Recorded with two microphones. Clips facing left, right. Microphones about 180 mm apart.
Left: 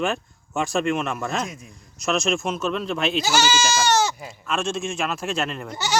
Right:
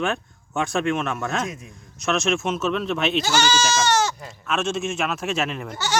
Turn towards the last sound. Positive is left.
turn(degrees=-5)  # may be behind; listen again after turning